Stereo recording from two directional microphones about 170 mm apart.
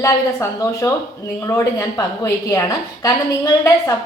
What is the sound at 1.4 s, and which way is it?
A woman's voice, 15° left (ahead or behind).